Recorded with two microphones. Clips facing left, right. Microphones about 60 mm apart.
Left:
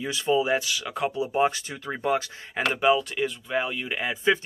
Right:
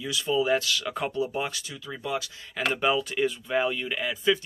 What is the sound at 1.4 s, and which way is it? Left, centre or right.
Speech, left.